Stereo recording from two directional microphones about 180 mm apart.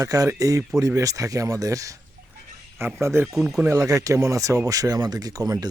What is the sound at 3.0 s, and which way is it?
Speech, 15° right (ahead or behind).